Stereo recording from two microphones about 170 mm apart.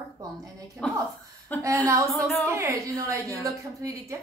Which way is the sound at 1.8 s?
15° right (ahead or behind).